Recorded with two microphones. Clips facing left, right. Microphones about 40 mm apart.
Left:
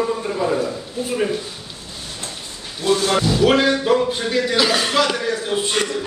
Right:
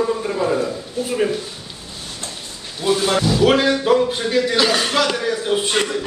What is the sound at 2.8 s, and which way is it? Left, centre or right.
A man's voice, centre.